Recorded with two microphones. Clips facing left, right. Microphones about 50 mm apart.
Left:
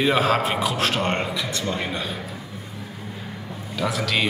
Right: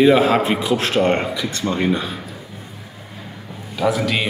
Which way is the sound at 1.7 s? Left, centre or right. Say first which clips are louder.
Right 6 dB; centre.